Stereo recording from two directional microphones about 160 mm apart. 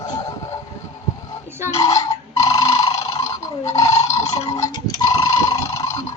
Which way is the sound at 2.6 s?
35° left (ahead or behind).